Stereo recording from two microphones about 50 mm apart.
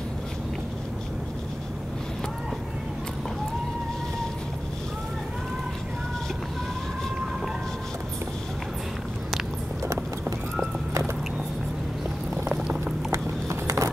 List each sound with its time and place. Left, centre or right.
13.1 s clip-clop: right